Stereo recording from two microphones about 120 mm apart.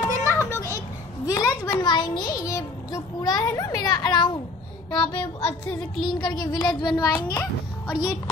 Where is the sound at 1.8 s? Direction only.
40° left (ahead or behind).